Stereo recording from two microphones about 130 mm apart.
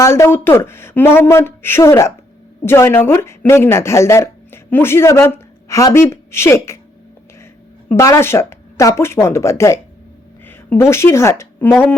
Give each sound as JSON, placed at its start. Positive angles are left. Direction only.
{"t": 0.0, "sound": "speech", "side_deg": 20}
{"t": 7.9, "sound": "speech", "side_deg": 20}